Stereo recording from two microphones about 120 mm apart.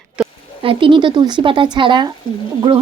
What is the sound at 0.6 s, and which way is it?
Speech, 45° right (ahead or behind).